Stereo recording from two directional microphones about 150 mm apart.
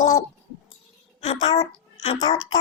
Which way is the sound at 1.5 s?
40° left (ahead or behind).